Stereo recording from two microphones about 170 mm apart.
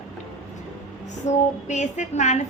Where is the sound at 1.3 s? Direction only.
45° left (ahead or behind).